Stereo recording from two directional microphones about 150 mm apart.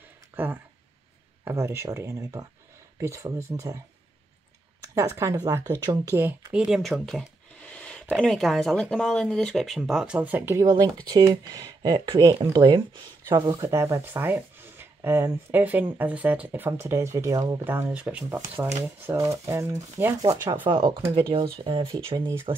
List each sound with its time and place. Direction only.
0.3 s a sound: 15° right (ahead or behind)
1.4 s speech: 15° right (ahead or behind)
4.8 s speech: 20° right (ahead or behind)
6.5 s a sound: 5° right (ahead or behind)
8.2 s speech: centre (ahead or behind)
10.6 s speech: 25° right (ahead or behind)
17.6 s speech: 10° right (ahead or behind)
20.2 s speech: 30° right (ahead or behind)